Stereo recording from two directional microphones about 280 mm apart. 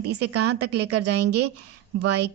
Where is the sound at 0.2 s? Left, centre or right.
Right.